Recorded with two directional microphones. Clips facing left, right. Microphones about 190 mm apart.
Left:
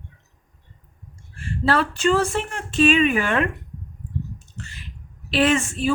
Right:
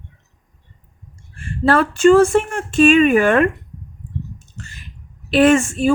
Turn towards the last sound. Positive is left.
turn(degrees=-45)  # may be behind; listen again after turning